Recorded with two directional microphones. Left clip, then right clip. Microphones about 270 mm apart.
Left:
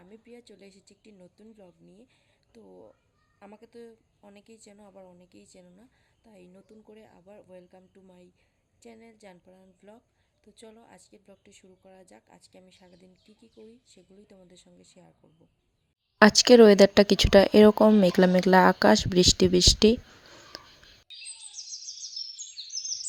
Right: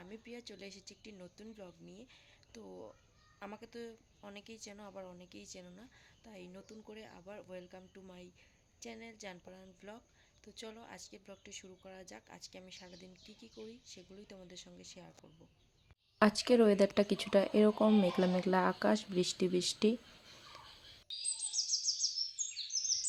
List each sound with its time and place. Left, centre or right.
0.0 s speech: centre
16.2 s speech: left
20.5 s whispering: left
22.7 s bird vocalization: centre